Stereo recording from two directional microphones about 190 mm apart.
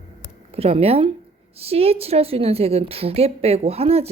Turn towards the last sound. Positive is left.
turn(degrees=-30)  # may be behind; listen again after turning